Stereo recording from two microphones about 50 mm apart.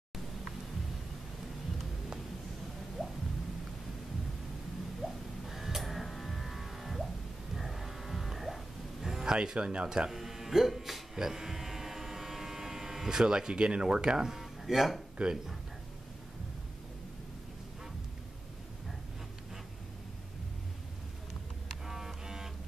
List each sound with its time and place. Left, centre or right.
3.0 s a sound: centre
5.0 s music: centre
15.2 s speech: centre
21.8 s music: centre